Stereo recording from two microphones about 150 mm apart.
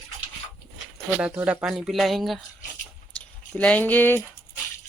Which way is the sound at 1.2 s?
10° right (ahead or behind).